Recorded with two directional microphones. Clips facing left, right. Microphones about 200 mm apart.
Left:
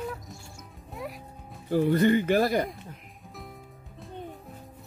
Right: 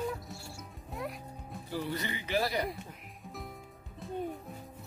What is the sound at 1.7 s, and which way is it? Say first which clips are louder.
Speech: left 14 dB; 50° left (ahead or behind).